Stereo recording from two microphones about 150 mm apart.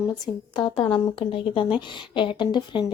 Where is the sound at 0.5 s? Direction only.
35° left (ahead or behind).